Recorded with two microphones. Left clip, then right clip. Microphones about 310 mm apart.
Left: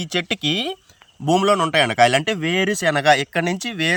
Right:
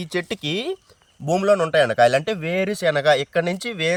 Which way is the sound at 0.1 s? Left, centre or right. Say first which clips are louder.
Left 4 dB; centre.